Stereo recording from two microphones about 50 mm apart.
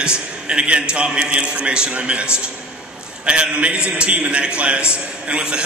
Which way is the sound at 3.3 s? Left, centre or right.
Right.